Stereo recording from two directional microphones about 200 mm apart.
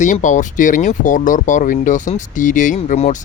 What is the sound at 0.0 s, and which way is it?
Speech, 40° left (ahead or behind).